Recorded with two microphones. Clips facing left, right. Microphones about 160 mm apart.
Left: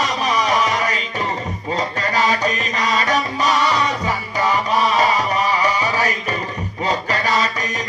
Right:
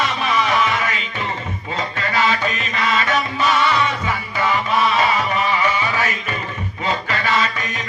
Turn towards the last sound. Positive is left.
turn(degrees=40)  # may be behind; listen again after turning